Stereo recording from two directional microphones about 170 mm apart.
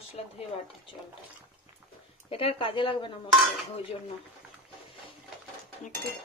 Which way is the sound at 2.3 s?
35° left (ahead or behind).